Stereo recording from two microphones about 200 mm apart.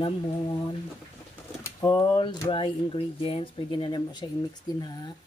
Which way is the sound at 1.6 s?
15° left (ahead or behind).